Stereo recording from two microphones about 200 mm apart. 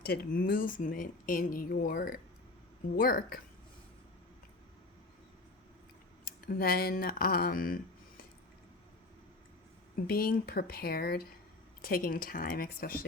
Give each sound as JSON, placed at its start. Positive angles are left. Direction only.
{"t": 0.0, "sound": "speech", "side_deg": 50}
{"t": 6.2, "sound": "speech", "side_deg": 45}
{"t": 9.9, "sound": "speech", "side_deg": 45}